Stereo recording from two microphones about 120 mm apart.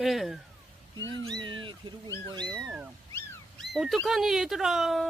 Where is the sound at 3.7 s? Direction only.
Centre (ahead or behind).